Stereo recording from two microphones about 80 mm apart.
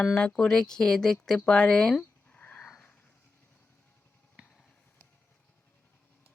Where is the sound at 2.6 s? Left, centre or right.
Centre.